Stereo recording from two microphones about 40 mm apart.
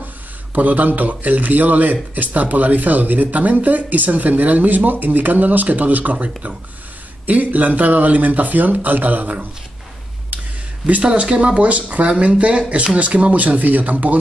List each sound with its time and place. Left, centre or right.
0.6 s speech: right
10.3 s a sound: right
11.1 s speech: right